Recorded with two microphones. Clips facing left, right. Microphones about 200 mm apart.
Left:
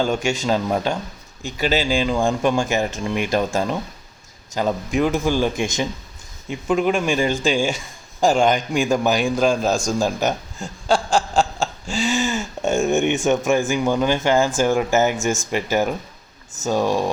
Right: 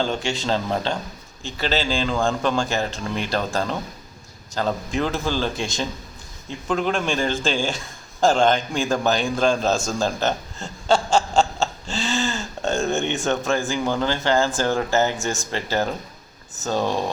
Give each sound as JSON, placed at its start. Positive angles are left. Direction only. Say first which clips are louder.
{"t": 0.0, "sound": "a man's voice", "louder": "left 3 dB", "side_deg": 15}